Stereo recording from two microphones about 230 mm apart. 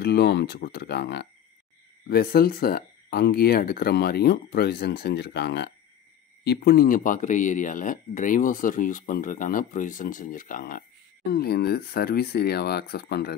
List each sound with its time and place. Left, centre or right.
0.0 s speech: left